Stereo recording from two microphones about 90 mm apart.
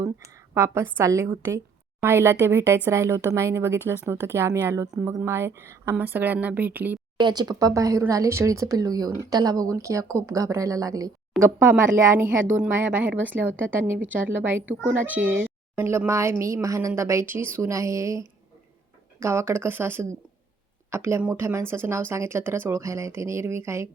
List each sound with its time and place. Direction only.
0.5 s a woman's voice: 30° right (ahead or behind)
7.2 s speech: 55° right (ahead or behind)
11.3 s speech: centre (ahead or behind)
11.8 s a woman's voice: 30° right (ahead or behind)